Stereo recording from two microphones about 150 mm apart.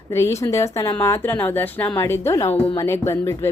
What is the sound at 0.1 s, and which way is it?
A woman's voice, 20° left (ahead or behind).